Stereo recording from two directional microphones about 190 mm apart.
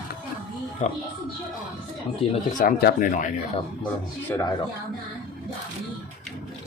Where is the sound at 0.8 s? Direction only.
35° left (ahead or behind).